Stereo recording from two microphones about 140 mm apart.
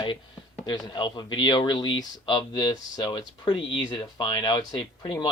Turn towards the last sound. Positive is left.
turn(degrees=30)  # may be behind; listen again after turning